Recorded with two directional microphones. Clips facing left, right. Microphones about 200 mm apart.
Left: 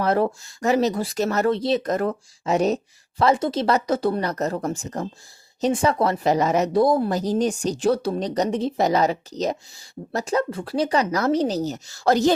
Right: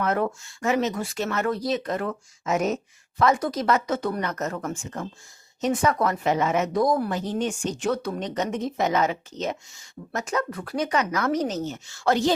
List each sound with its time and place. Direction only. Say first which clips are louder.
0.0 s a woman's voice: left 4 dB; 35° left (ahead or behind)
1.5 s speech: left 4 dB; 25° left (ahead or behind)
1.8 s a woman's voice: left 5 dB; 40° left (ahead or behind)